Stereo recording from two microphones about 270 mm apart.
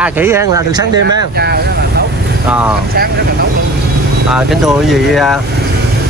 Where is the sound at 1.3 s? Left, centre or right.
Right.